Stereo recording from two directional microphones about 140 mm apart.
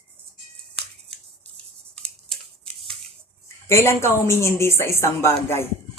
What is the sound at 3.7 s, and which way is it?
Speech, 20° left (ahead or behind).